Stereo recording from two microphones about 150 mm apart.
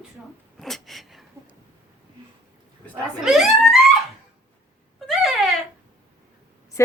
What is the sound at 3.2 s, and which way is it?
Speech, centre (ahead or behind).